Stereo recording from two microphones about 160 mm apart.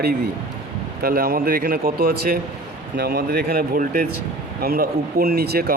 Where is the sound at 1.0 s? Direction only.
75° right (ahead or behind).